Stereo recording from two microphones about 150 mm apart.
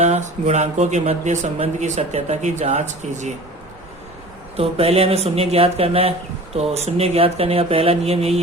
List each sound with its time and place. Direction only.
0.0 s speech: 50° right (ahead or behind)
4.5 s speech: 40° right (ahead or behind)